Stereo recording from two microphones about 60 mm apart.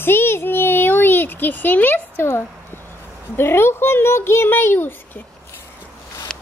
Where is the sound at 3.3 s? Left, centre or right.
Left.